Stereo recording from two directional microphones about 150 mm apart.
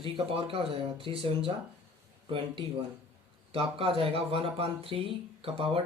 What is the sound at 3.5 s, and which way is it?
Speech, 35° right (ahead or behind).